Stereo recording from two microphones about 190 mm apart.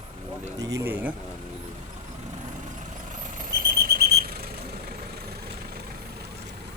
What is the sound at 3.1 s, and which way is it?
Vehicle, 45° right (ahead or behind).